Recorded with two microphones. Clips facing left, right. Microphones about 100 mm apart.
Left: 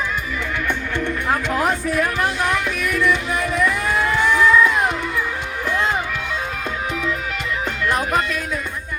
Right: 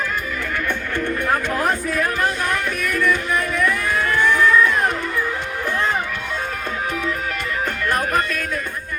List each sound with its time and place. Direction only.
0.9 s music: 15° left (ahead or behind)
2.5 s music: 50° right (ahead or behind)
3.5 s a sound: 15° left (ahead or behind)
7.9 s music: 50° right (ahead or behind)